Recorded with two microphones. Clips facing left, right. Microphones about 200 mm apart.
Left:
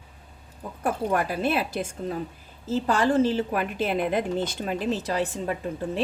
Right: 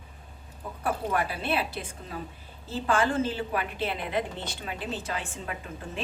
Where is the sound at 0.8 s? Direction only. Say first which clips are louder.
Left 4 dB; 45° left (ahead or behind).